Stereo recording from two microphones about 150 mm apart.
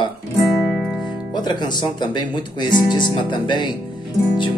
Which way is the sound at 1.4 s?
30° left (ahead or behind).